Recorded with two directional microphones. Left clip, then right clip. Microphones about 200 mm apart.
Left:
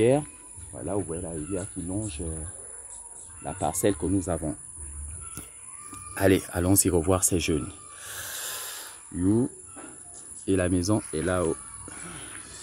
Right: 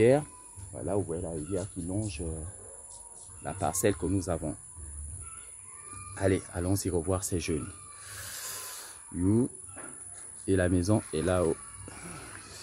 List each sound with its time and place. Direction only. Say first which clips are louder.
0.0 s speech: left 1 dB; 10° left (ahead or behind)
3.4 s speech: left 3 dB; 25° left (ahead or behind)
6.1 s speech: left 6 dB; 55° left (ahead or behind); by 8.1 s 30° left (ahead or behind)
8.1 s a sound: left 5 dB; 10° left (ahead or behind)
9.2 s speech: left 3 dB; centre (ahead or behind)